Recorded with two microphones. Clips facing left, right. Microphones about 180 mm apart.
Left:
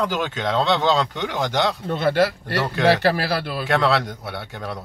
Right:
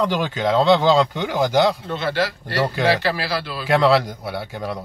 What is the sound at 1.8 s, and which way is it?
A man's voice, 50° left (ahead or behind).